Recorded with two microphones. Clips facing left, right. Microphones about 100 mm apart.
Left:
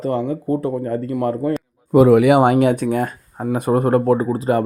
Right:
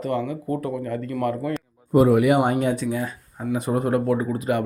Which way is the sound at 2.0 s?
90° left.